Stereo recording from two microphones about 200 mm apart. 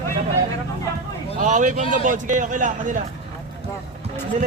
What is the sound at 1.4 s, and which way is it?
A man's voice, 40° right (ahead or behind).